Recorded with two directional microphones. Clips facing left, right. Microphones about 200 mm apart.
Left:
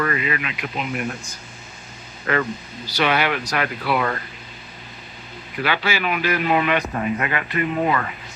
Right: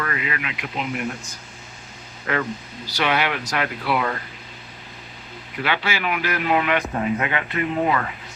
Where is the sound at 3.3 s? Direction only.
5° right (ahead or behind).